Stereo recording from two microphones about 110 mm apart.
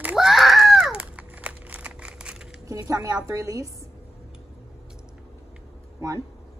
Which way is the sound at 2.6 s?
30° right (ahead or behind).